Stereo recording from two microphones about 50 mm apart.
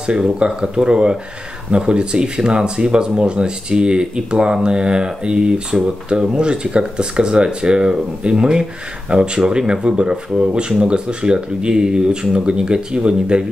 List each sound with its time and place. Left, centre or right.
0.0 s speech: centre